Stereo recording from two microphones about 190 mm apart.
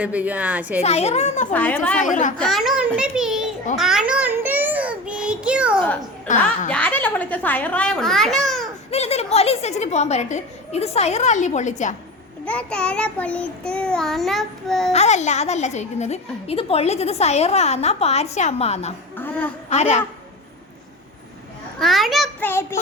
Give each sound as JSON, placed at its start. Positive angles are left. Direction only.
{"t": 0.0, "sound": "a woman's voice", "side_deg": -10}
{"t": 0.8, "sound": "a woman's voice", "side_deg": 35}
{"t": 1.5, "sound": "a child's voice", "side_deg": 5}
{"t": 2.0, "sound": "a woman's voice", "side_deg": 40}
{"t": 2.4, "sound": "child singing", "side_deg": 0}
{"t": 6.3, "sound": "speech", "side_deg": 40}
{"t": 6.7, "sound": "a child's voice", "side_deg": 5}
{"t": 8.9, "sound": "a woman's voice", "side_deg": 35}
{"t": 12.5, "sound": "child singing", "side_deg": 5}
{"t": 14.9, "sound": "a woman's voice", "side_deg": 35}
{"t": 19.1, "sound": "a woman's voice", "side_deg": 10}
{"t": 19.7, "sound": "a woman's voice", "side_deg": 35}
{"t": 21.8, "sound": "child singing", "side_deg": 0}